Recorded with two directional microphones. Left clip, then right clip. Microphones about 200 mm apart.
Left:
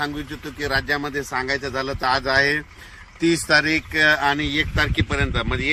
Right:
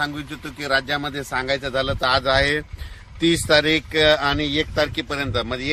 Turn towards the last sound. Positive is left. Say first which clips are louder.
# left 1 dB
turn(degrees=-70)  # may be behind; listen again after turning